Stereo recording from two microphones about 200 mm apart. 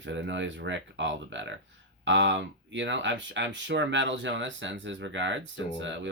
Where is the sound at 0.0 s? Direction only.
65° right (ahead or behind).